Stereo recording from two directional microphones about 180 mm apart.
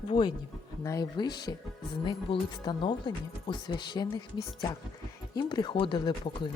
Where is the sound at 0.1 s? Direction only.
25° left (ahead or behind).